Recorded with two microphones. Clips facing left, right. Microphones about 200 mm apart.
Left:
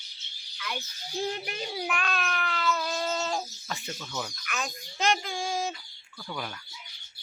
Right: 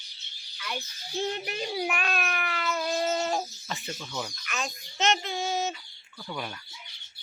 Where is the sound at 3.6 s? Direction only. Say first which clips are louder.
Right 1 dB; centre (ahead or behind).